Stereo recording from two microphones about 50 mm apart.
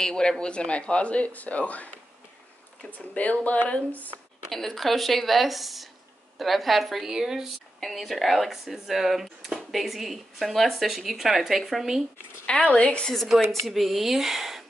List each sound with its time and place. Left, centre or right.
0.0 s speech: centre
2.9 s speech: left
4.5 s speech: centre
7.8 s speech: centre
12.7 s speech: left
13.5 s speech: centre